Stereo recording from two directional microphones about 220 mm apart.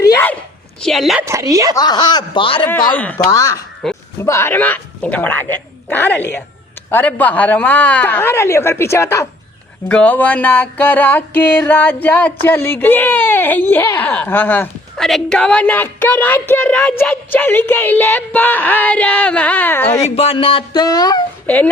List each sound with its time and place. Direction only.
0.0 s dog: 10° left (ahead or behind)
0.8 s a woman's voice: centre (ahead or behind)
1.3 s a woman's voice: 15° right (ahead or behind)
1.7 s speech: 20° left (ahead or behind)
2.9 s music: 5° left (ahead or behind)
3.8 s speech: centre (ahead or behind)
4.2 s music: 10° left (ahead or behind)
20.1 s speech: 25° left (ahead or behind); by 21.7 s 5° left (ahead or behind)